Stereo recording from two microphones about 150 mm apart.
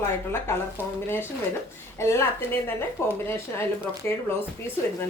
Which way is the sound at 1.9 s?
15° left (ahead or behind).